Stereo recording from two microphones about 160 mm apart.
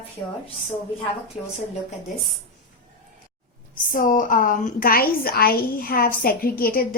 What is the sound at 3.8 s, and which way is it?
A woman's voice, 60° left (ahead or behind).